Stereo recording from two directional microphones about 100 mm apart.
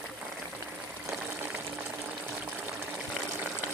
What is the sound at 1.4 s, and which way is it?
Water, 20° right (ahead or behind).